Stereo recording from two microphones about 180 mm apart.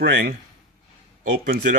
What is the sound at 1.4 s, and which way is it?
Speech, 50° right (ahead or behind).